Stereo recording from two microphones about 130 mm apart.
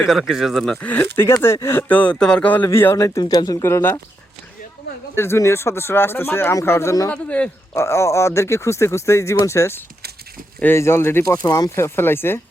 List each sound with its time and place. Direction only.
0.0 s speech: centre (ahead or behind); by 4.0 s 20° left (ahead or behind)
5.1 s speech: 20° left (ahead or behind)
7.1 s speech: 10° left (ahead or behind)
7.7 s speech: 20° left (ahead or behind)